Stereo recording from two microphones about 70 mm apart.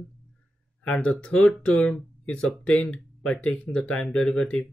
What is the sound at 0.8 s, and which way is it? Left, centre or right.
Speech, centre.